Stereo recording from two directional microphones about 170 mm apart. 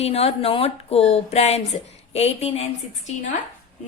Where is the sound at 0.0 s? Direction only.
35° left (ahead or behind).